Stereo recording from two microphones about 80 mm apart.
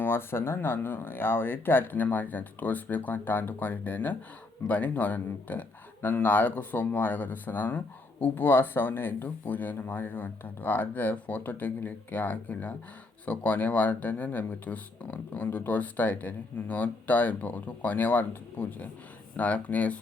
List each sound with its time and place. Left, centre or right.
0.0 s speech: left